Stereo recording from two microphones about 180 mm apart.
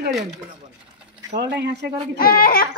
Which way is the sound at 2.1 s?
55° left (ahead or behind).